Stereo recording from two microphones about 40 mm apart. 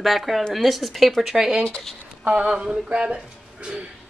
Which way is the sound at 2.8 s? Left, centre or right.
Right.